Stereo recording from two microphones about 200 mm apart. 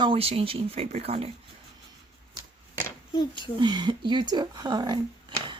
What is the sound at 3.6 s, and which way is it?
Speech, 20° right (ahead or behind).